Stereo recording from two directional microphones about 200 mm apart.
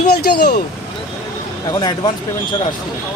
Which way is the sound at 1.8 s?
20° left (ahead or behind).